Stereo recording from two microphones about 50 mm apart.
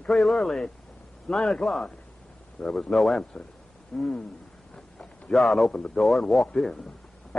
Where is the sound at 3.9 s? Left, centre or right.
Centre.